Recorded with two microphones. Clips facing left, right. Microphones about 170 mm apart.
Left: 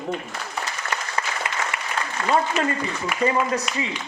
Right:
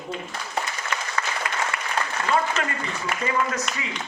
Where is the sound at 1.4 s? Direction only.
25° left (ahead or behind).